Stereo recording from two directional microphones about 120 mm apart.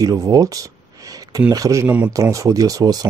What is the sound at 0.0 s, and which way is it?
Speech, 35° right (ahead or behind).